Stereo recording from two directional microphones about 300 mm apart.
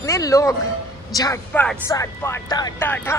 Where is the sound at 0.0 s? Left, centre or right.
Centre.